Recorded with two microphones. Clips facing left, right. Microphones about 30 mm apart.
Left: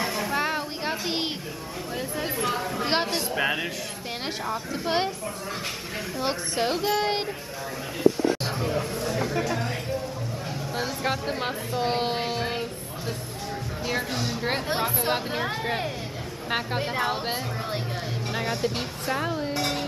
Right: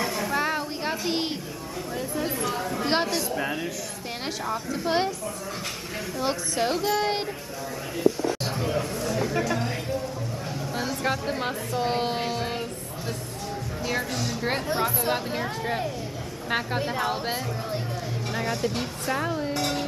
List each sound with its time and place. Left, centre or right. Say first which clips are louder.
0.0 s a sound: even; centre
2.0 s speech: even; centre
3.3 s speech: left 3 dB; left
4.5 s speech: right 2 dB; centre
6.6 s speech: even; centre
8.5 s chatter: even; centre
9.2 s a sound: right 2 dB; centre
10.7 s a sound: even; centre
11.7 s music: even; centre
13.8 s music: even; centre
14.8 s speech: even; centre
16.4 s speech: right 1 dB; centre